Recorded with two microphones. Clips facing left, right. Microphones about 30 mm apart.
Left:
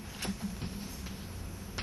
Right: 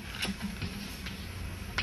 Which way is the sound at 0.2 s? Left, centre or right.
Right.